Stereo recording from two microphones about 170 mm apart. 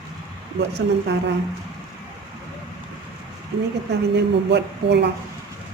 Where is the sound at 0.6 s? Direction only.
90° right.